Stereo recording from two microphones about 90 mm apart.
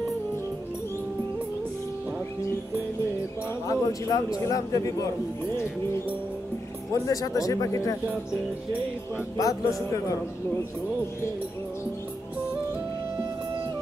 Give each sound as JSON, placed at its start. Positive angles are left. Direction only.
{"t": 3.6, "sound": "a man's voice", "side_deg": 40}
{"t": 6.9, "sound": "speech", "side_deg": 40}
{"t": 9.4, "sound": "speech", "side_deg": 40}